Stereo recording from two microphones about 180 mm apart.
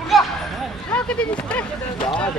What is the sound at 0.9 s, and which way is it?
Speech, 5° left (ahead or behind).